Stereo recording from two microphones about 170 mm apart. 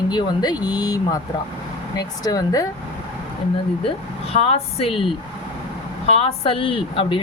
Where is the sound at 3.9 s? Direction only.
35° left (ahead or behind).